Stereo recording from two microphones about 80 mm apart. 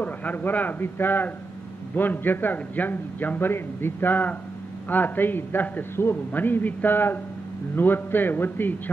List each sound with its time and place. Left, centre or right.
0.0 s a man's voice: left